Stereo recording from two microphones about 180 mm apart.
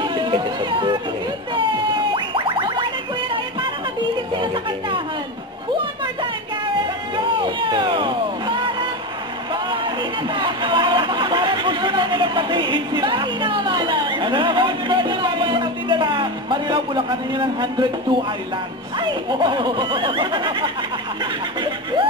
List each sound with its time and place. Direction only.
0.0 s chatter: 25° right (ahead or behind)
2.1 s music: 25° right (ahead or behind)
4.3 s music: 25° right (ahead or behind)
7.2 s music: 25° right (ahead or behind)
9.5 s a sound: 25° right (ahead or behind)
18.9 s speech: 25° right (ahead or behind)
21.5 s snicker: 25° right (ahead or behind)